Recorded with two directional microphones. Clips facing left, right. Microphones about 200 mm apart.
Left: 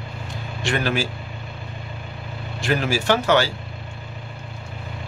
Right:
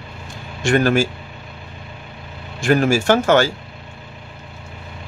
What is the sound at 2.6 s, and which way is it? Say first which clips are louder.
Speech: right 7 dB; 50° right (ahead or behind).